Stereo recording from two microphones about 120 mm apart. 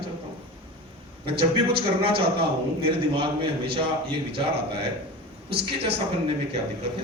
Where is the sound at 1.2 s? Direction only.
50° right (ahead or behind).